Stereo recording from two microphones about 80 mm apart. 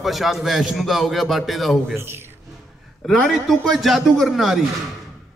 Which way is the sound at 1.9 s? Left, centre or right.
Right.